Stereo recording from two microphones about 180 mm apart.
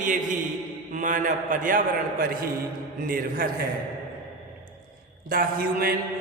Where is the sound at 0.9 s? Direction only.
45° right (ahead or behind).